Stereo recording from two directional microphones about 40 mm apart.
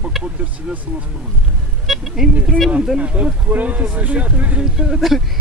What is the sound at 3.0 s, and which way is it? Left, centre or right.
Speech, right.